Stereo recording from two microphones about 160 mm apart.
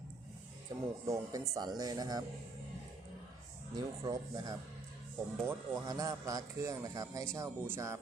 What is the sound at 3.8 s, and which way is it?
Speech, 25° right (ahead or behind).